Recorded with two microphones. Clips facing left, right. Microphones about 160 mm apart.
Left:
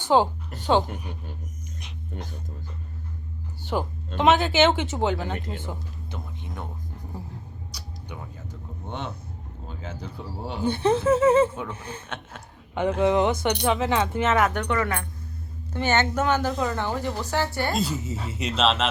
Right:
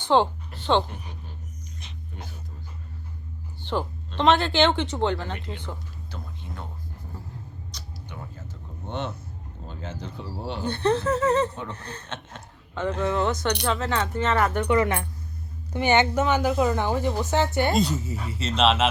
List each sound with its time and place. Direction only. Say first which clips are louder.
0.0 s a woman's voice: even; 5° left (ahead or behind)
4.2 s speech: left 1 dB; 5° left (ahead or behind)
5.3 s speech: left 3 dB; 45° left (ahead or behind)
6.1 s music: left 1 dB; 20° left (ahead or behind)
7.7 s a sound: left 1 dB; 10° left (ahead or behind)
9.6 s a sound: right 1 dB; 10° left (ahead or behind)
10.5 s speech: left 2 dB; 10° left (ahead or behind)
14.7 s a woman's voice: right 4 dB; 20° right (ahead or behind)
18.0 s speech: left 1 dB; 25° left (ahead or behind)
18.5 s speech: right 2 dB; centre (ahead or behind)